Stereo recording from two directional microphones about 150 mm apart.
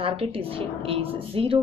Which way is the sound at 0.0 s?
40° right (ahead or behind).